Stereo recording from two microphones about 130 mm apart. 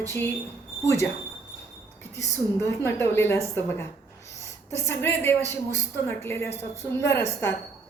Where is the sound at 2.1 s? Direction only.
20° left (ahead or behind).